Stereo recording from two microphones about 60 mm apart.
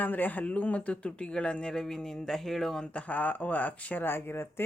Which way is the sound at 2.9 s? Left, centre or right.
Left.